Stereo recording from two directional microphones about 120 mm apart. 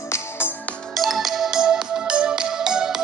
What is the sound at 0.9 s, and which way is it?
Music, centre (ahead or behind).